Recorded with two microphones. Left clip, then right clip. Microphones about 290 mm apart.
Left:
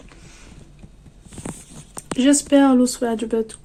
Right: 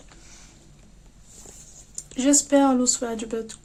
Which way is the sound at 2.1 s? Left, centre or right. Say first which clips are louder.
Left 4 dB; centre.